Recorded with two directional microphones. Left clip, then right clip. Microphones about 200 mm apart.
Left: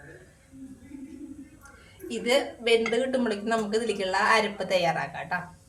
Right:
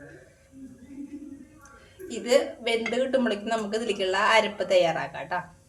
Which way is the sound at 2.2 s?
20° right (ahead or behind).